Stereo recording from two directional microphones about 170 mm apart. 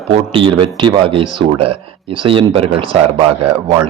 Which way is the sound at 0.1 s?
30° right (ahead or behind).